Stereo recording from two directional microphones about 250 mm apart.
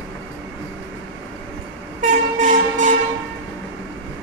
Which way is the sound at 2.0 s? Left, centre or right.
Right.